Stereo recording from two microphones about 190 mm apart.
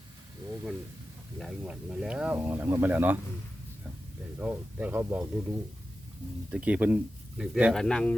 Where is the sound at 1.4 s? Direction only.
Centre (ahead or behind).